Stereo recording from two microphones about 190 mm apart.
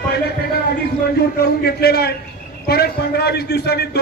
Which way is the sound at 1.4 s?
55° left (ahead or behind).